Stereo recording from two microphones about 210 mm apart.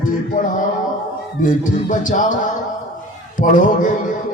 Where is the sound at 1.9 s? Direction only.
40° left (ahead or behind).